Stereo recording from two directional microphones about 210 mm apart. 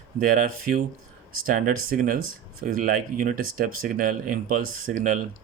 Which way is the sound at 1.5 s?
40° right (ahead or behind).